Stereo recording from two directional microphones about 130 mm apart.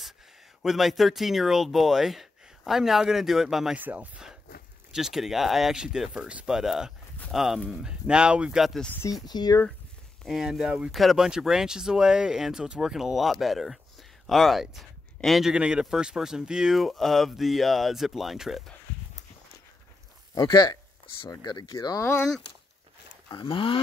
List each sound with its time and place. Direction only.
0.6 s speech: centre (ahead or behind)
9.2 s speech: 30° left (ahead or behind)
10.2 s speech: centre (ahead or behind)
20.3 s speech: 30° left (ahead or behind)
23.3 s speech: 40° left (ahead or behind)